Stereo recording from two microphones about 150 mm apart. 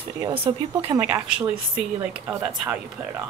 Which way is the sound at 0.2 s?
40° right (ahead or behind).